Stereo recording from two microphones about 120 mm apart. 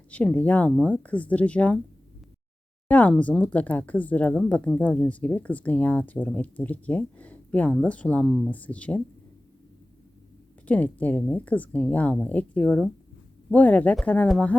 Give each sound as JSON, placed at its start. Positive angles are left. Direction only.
{"t": 0.1, "sound": "speech", "side_deg": 10}
{"t": 2.8, "sound": "speech", "side_deg": 10}
{"t": 10.7, "sound": "speech", "side_deg": 10}